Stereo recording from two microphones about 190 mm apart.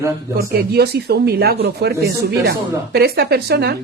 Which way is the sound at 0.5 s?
55° right (ahead or behind).